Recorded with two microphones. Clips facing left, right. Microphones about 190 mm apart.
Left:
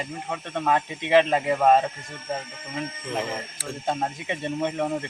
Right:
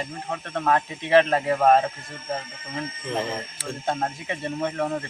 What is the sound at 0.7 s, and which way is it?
Speech, 15° left (ahead or behind).